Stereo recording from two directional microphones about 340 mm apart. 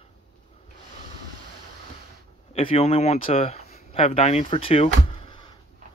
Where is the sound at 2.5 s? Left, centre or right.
Centre.